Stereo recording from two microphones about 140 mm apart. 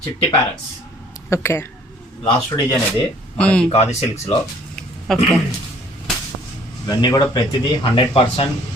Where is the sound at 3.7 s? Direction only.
50° left (ahead or behind).